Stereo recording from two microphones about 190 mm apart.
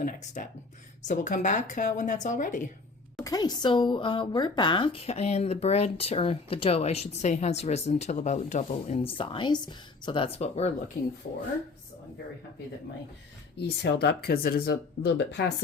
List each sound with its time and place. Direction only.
0.0 s speech: 40° left (ahead or behind)
3.2 s speech: 20° left (ahead or behind)
13.6 s speech: 60° left (ahead or behind)